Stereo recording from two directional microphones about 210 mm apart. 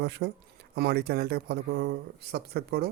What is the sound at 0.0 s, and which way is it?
Speech, 50° right (ahead or behind).